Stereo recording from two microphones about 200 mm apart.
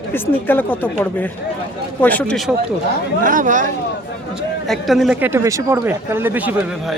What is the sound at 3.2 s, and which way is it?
Speech, 40° right (ahead or behind).